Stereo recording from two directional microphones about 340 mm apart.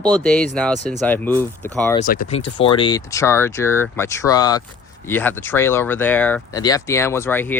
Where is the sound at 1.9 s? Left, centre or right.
Left.